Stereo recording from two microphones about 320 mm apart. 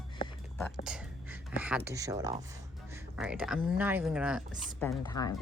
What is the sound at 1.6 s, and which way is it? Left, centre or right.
A man's voice, centre.